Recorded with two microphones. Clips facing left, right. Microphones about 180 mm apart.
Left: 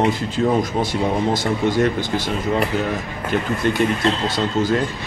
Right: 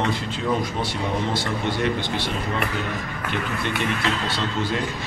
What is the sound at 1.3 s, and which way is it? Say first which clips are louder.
Speech: left 6 dB; 45° left (ahead or behind).